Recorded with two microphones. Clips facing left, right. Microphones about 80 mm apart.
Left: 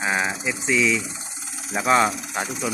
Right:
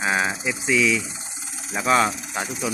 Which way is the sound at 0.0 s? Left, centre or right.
Centre.